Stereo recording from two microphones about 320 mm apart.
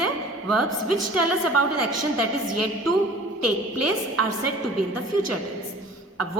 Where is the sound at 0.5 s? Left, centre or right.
Right.